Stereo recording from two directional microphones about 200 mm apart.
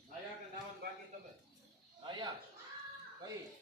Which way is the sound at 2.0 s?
25° right (ahead or behind).